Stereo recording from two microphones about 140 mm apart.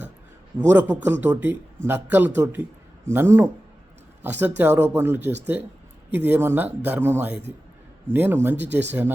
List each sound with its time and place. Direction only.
0.7 s speech: 15° right (ahead or behind)